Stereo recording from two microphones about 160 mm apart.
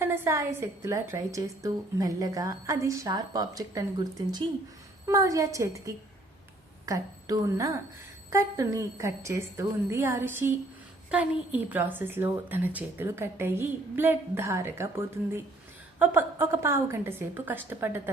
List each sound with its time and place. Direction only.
0.0 s a woman's voice: 15° right (ahead or behind)